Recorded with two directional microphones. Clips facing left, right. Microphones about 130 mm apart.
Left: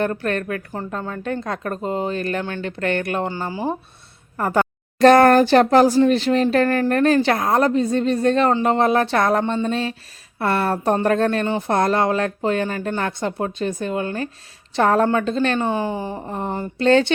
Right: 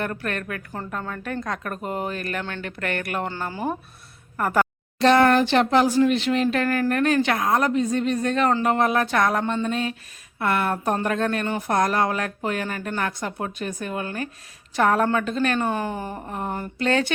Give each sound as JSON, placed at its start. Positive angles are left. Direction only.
{"t": 0.0, "sound": "a woman's voice", "side_deg": 30}
{"t": 4.4, "sound": "speech", "side_deg": 30}
{"t": 4.9, "sound": "a woman's voice", "side_deg": 45}